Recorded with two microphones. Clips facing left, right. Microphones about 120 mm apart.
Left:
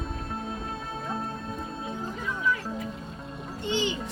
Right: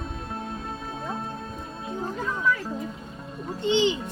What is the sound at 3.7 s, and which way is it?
Music, 25° right (ahead or behind).